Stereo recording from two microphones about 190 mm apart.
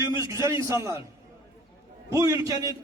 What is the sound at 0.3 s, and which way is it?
Speech, 15° right (ahead or behind).